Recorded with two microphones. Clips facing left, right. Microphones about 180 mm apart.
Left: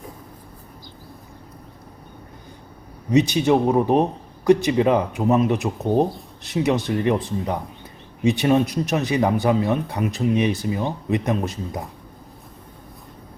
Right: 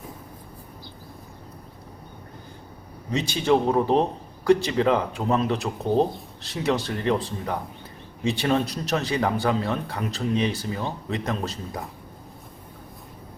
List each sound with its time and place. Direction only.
3.1 s speech: 15° left (ahead or behind)
8.2 s speech: 15° left (ahead or behind)